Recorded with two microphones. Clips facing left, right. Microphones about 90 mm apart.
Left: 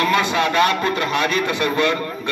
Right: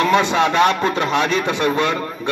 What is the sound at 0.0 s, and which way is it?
Speech, 25° right (ahead or behind).